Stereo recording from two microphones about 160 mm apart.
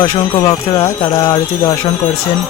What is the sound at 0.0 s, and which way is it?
Speech, 25° left (ahead or behind).